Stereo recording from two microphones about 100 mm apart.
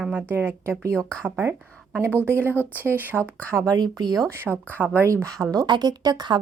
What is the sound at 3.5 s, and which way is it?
Speech, 35° right (ahead or behind).